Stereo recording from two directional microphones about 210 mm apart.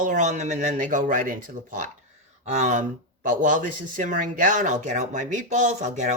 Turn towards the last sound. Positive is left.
turn(degrees=-35)  # may be behind; listen again after turning